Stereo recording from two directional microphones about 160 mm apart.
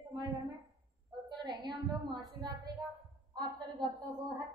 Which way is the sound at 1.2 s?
30° right (ahead or behind).